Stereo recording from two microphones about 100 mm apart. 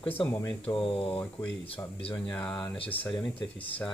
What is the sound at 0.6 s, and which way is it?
Speech, 65° left (ahead or behind).